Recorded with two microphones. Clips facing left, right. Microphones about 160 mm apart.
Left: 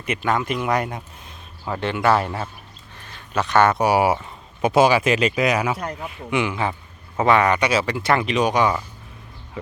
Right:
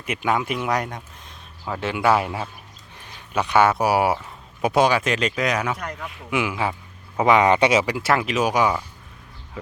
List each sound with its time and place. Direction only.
0.0 s speech: 10° right (ahead or behind)